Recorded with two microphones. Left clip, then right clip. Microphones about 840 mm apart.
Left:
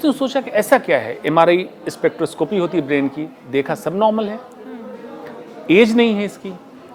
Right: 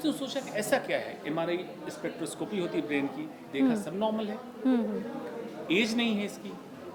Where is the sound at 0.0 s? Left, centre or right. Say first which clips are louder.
Left 14 dB; left.